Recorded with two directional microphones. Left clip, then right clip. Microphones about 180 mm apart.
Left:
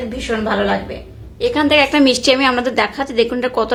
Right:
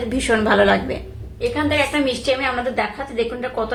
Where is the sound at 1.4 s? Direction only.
55° left (ahead or behind).